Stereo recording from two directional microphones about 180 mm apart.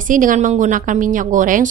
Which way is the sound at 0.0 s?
45° right (ahead or behind).